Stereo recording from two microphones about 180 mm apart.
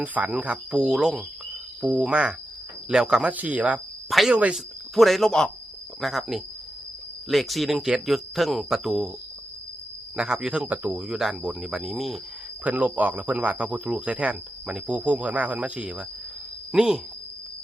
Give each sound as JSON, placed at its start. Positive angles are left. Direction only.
{"t": 0.0, "sound": "speech", "side_deg": -10}
{"t": 10.2, "sound": "speech", "side_deg": -5}